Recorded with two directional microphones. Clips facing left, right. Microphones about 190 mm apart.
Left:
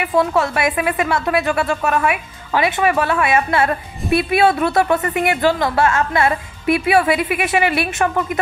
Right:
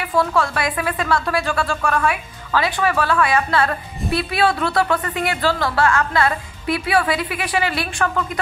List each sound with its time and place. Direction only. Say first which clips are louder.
0.0 s a woman's voice: left 3 dB; 25° left (ahead or behind)